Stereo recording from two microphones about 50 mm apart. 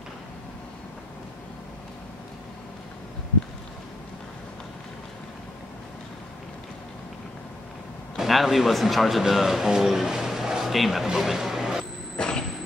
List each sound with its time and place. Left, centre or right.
8.2 s speech: centre
12.2 s vehicle: centre